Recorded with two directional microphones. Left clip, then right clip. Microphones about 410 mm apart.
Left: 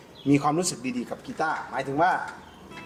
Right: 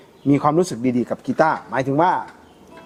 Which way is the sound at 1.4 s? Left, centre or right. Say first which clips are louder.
Right 9 dB; right.